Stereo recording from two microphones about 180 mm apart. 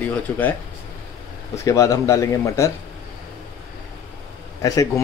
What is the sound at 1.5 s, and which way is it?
A man's voice, 15° left (ahead or behind).